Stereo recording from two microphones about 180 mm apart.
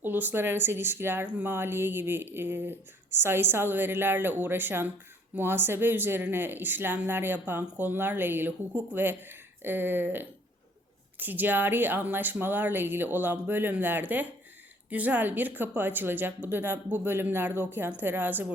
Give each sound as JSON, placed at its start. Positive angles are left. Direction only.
{"t": 0.0, "sound": "speech", "side_deg": -10}